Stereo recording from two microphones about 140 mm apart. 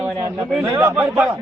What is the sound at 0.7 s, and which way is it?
Speech, 15° right (ahead or behind).